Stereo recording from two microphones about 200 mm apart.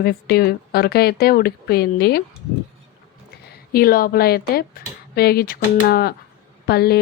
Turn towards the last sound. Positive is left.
turn(degrees=50)  # may be behind; listen again after turning